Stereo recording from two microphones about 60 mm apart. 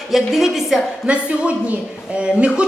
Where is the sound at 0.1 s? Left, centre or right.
Centre.